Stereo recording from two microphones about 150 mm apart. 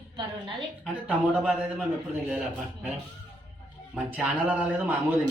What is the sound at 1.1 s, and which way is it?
A man's voice, 5° right (ahead or behind).